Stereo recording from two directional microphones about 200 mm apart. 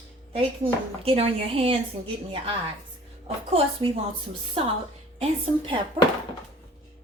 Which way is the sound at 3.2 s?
30° right (ahead or behind).